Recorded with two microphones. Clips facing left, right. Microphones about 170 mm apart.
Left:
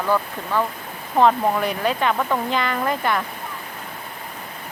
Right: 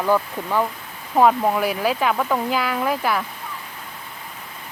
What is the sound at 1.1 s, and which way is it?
Speech, 5° right (ahead or behind).